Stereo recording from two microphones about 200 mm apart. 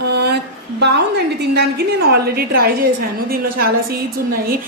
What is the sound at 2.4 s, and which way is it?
A woman's voice, 50° right (ahead or behind).